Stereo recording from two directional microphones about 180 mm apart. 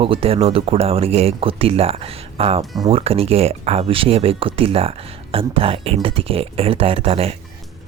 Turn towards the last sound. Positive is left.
turn(degrees=-35)  # may be behind; listen again after turning